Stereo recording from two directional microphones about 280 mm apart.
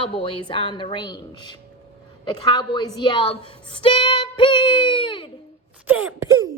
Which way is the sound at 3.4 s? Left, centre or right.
Centre.